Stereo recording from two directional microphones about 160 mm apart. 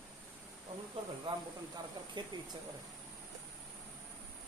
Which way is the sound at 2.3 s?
25° right (ahead or behind).